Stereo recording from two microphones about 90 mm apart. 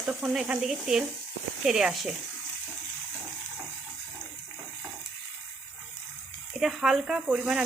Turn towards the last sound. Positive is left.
turn(degrees=-10)  # may be behind; listen again after turning